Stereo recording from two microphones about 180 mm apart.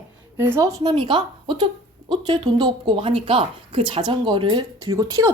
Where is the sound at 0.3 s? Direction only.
15° right (ahead or behind).